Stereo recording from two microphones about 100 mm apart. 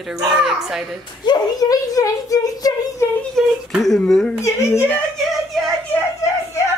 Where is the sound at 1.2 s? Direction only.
40° left (ahead or behind).